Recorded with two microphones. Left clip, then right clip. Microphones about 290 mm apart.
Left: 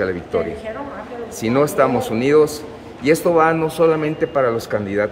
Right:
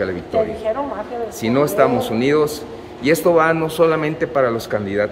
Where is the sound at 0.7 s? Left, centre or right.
Right.